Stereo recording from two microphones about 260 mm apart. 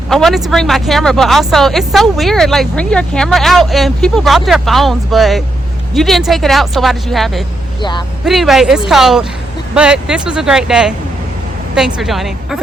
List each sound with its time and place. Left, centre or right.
0.1 s speech: centre
7.8 s a man's voice: centre
8.2 s speech: centre
11.9 s speech: centre